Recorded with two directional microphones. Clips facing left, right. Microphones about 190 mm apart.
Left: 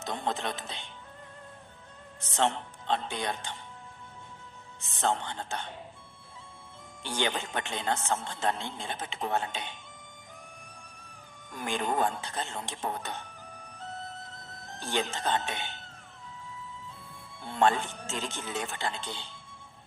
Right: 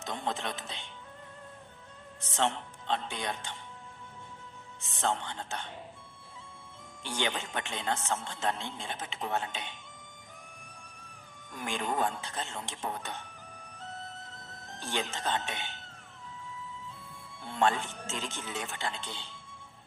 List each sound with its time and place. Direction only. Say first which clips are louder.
0.0 s a man's voice: left 2 dB; 35° left (ahead or behind)
2.3 s a man's voice: left 2 dB; 40° left (ahead or behind)
4.9 s a man's voice: left 2 dB; 40° left (ahead or behind)
7.0 s a man's voice: left 2 dB; 35° left (ahead or behind)
11.6 s a man's voice: left 3 dB; 35° left (ahead or behind)
14.8 s a man's voice: left 3 dB; 35° left (ahead or behind)
17.5 s a man's voice: left 3 dB; 35° left (ahead or behind)